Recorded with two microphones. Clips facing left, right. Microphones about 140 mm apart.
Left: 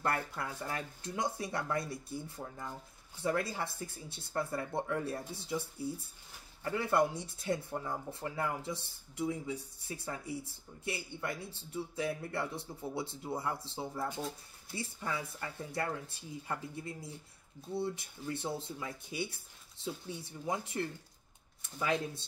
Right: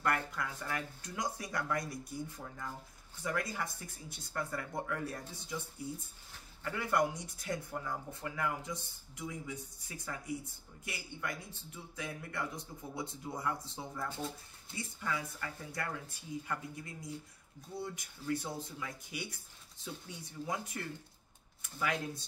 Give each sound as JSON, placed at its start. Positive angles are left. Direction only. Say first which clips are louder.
{"t": 0.0, "sound": "speech", "louder": "even", "side_deg": 30}
{"t": 6.6, "sound": "speech", "louder": "left 2 dB", "side_deg": 25}